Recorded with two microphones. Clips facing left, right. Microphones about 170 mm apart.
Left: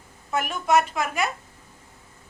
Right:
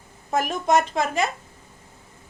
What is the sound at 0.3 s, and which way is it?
Speech, 40° right (ahead or behind).